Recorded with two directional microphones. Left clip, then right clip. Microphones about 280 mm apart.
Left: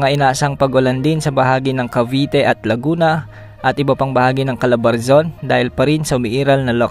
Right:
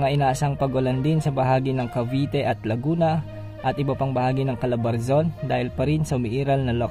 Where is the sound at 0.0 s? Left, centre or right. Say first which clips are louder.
Left 8 dB; left.